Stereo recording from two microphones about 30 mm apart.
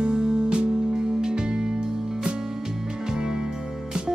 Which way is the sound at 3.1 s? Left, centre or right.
Right.